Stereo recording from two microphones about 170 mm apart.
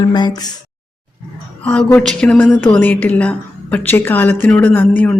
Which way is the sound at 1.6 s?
5° left (ahead or behind).